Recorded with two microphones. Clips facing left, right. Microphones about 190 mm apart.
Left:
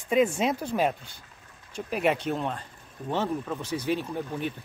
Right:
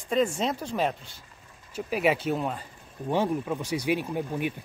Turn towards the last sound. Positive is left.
turn(degrees=-10)  # may be behind; listen again after turning